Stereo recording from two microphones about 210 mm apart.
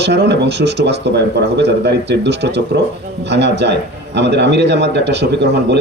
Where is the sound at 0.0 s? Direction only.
55° right (ahead or behind).